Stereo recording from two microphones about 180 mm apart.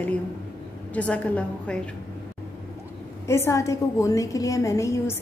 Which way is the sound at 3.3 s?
15° left (ahead or behind).